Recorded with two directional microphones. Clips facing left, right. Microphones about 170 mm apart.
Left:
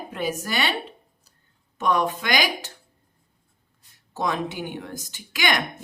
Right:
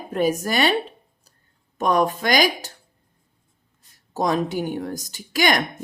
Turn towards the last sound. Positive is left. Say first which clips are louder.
# right 5 dB
turn(degrees=-40)  # may be behind; listen again after turning